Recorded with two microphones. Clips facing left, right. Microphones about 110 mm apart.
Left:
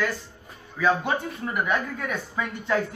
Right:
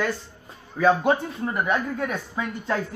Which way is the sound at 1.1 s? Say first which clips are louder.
Right 5 dB; 20° right (ahead or behind).